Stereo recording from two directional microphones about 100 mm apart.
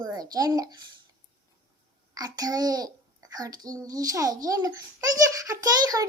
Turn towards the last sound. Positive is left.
turn(degrees=-40)  # may be behind; listen again after turning